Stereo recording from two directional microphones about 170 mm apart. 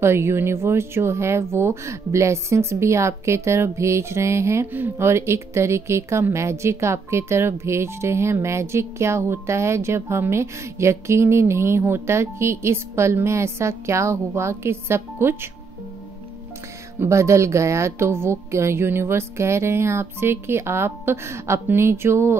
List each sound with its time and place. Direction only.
0.0 s speech: 15° right (ahead or behind)
17.0 s speech: 15° right (ahead or behind)